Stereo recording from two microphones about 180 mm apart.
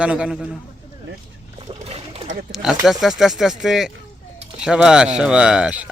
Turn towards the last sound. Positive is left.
turn(degrees=-5)  # may be behind; listen again after turning